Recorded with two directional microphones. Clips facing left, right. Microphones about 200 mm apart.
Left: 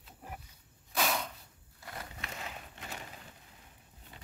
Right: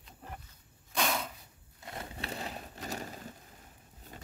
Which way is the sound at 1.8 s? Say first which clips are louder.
Right 4 dB; 25° right (ahead or behind).